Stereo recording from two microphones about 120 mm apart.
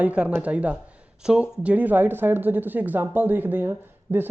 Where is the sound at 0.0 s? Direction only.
10° right (ahead or behind).